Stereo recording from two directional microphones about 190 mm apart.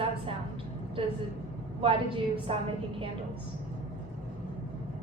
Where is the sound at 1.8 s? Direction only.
30° right (ahead or behind).